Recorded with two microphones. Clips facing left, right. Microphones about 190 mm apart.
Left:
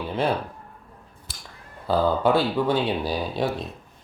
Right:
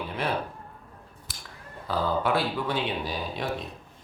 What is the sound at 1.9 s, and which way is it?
Speech, 30° left (ahead or behind).